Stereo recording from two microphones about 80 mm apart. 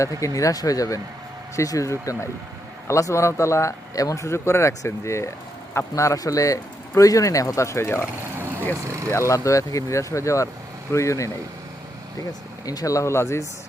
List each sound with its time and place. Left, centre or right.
0.0 s speech: left
9.1 s speech: left
12.6 s speech: left